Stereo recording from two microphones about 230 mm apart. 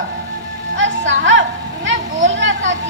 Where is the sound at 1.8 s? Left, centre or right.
Right.